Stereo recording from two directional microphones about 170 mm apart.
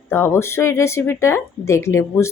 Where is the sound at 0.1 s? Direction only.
15° left (ahead or behind).